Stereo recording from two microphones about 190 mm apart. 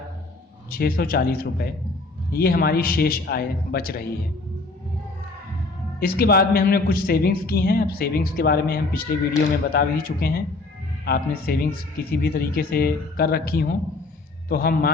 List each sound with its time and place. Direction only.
0.7 s a man's voice: 50° left (ahead or behind)
6.0 s a man's voice: 55° left (ahead or behind)